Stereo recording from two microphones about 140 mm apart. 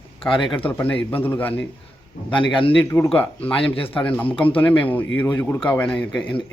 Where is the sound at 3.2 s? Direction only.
10° left (ahead or behind).